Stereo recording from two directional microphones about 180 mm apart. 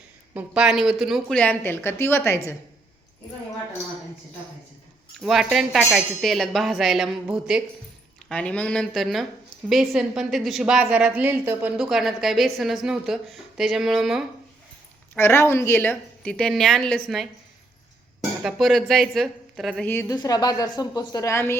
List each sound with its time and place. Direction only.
0.3 s a woman's voice: 5° right (ahead or behind); by 2.4 s 15° left (ahead or behind)
5.2 s a woman's voice: centre (ahead or behind)
15.1 s a woman's voice: 15° left (ahead or behind)
19.9 s a woman's voice: 15° left (ahead or behind)